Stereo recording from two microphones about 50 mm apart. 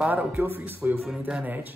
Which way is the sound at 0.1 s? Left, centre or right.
Right.